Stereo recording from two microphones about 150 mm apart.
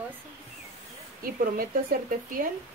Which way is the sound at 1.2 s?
75° right (ahead or behind).